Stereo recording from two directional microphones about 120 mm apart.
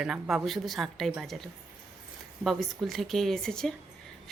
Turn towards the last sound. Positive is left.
turn(degrees=5)  # may be behind; listen again after turning